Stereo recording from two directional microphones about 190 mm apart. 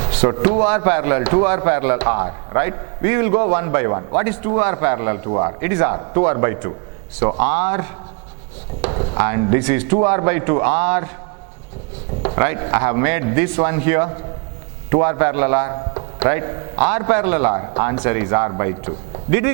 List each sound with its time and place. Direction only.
0.1 s a man's voice: 15° right (ahead or behind)
8.9 s a man's voice: 25° right (ahead or behind)
12.4 s speech: 20° right (ahead or behind)